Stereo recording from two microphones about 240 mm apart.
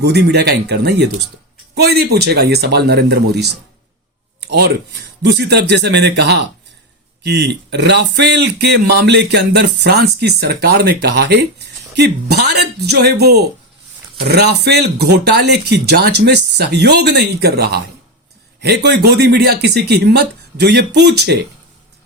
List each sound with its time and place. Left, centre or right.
0.0 s speech: right